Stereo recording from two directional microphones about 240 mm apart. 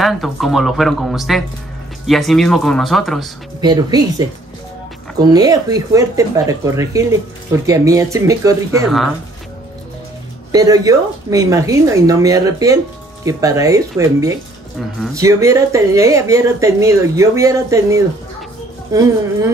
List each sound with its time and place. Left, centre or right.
0.0 s speech: centre
3.6 s speech: centre
10.5 s speech: centre